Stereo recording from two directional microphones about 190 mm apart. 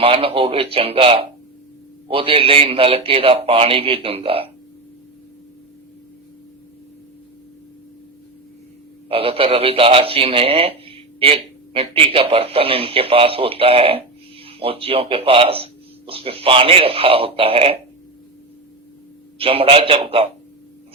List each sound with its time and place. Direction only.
0.0 s speech: 30° right (ahead or behind)
9.0 s speech: 30° right (ahead or behind)
19.4 s speech: 30° right (ahead or behind)